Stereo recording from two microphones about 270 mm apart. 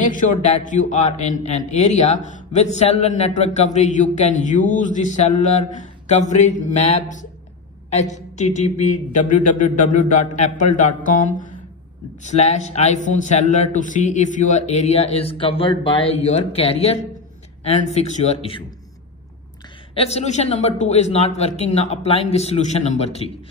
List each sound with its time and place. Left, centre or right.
0.0 s a man's voice: left
19.9 s a man's voice: left